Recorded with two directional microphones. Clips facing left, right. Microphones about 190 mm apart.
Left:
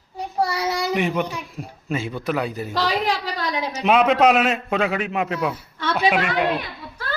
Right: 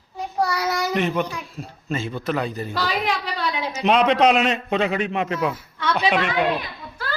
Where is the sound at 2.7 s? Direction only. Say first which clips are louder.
Left 3 dB; 35° left (ahead or behind).